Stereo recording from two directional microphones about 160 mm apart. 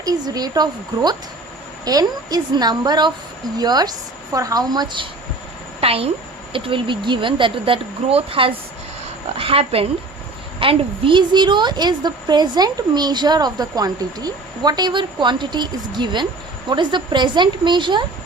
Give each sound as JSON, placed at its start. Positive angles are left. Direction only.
{"t": 0.0, "sound": "a woman's voice", "side_deg": -25}
{"t": 5.8, "sound": "a woman's voice", "side_deg": -40}